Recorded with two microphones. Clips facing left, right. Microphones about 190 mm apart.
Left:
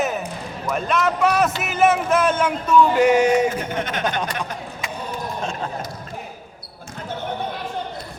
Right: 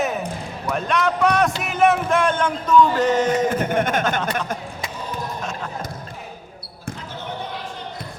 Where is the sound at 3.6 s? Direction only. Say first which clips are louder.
Right 5 dB; 50° right (ahead or behind).